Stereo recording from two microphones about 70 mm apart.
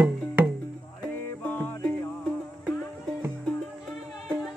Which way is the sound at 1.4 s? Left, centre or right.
Left.